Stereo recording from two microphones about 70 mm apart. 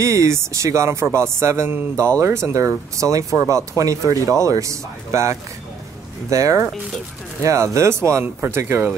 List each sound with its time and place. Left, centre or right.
0.0 s speech: right